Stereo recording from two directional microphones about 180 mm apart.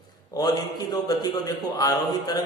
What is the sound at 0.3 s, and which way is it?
A man's voice, 20° left (ahead or behind).